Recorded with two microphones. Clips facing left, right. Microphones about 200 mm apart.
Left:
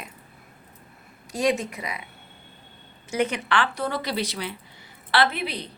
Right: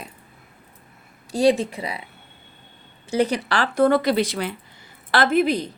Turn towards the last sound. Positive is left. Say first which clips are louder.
# right 6 dB
turn(degrees=-45)  # may be behind; listen again after turning